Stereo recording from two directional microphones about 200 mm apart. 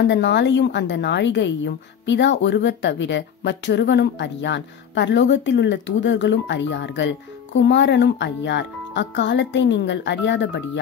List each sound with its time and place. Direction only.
0.0 s a woman's voice: 60° left (ahead or behind)